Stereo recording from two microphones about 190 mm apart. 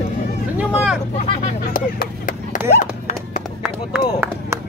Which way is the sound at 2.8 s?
45° left (ahead or behind).